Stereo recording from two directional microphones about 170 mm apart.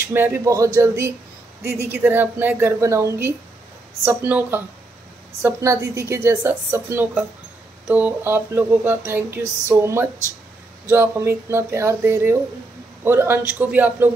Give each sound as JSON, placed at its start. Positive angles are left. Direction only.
{"t": 0.1, "sound": "a woman's voice", "side_deg": -15}